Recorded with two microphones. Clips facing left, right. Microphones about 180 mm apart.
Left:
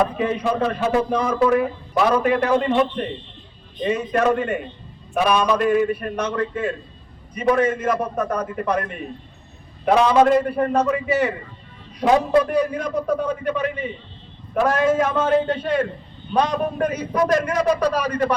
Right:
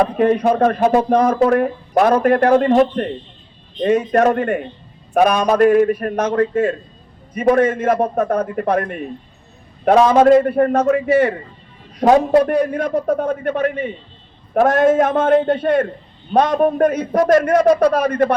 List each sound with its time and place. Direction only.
0.2 s a man's voice: 55° right (ahead or behind)